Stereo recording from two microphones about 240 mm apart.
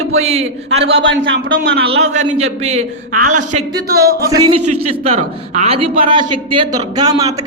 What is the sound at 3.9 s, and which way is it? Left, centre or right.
Speech, right.